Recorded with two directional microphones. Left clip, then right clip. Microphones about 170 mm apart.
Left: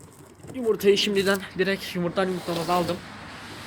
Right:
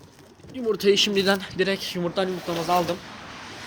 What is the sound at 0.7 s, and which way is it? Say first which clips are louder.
Speech: right 1 dB; 30° right (ahead or behind).